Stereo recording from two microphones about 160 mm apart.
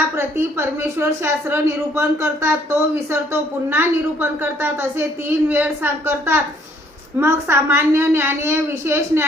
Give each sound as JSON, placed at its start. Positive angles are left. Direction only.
{"t": 0.2, "sound": "a woman's voice", "side_deg": -15}